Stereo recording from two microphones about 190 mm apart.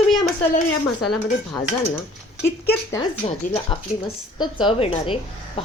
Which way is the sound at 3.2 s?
30° left (ahead or behind).